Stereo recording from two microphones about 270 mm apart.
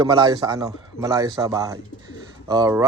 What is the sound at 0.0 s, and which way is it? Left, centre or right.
A man's voice, centre.